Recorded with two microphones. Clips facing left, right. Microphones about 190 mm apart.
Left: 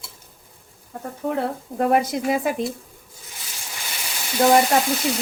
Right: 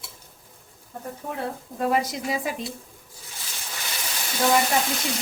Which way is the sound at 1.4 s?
60° left (ahead or behind).